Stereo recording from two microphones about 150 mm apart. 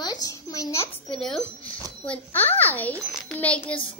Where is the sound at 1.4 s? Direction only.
10° left (ahead or behind).